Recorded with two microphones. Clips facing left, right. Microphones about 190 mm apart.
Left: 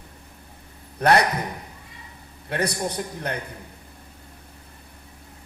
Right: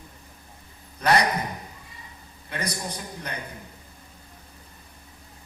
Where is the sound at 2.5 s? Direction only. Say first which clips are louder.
Left 6 dB; 60° left (ahead or behind).